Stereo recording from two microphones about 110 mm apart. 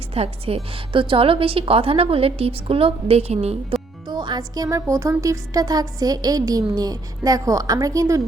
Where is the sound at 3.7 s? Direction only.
60° right (ahead or behind).